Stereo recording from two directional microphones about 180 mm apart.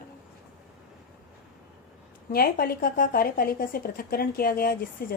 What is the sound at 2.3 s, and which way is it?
A woman's voice, 55° left (ahead or behind).